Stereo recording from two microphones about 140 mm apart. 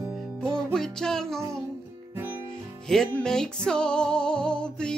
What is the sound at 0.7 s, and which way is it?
Music, 5° left (ahead or behind).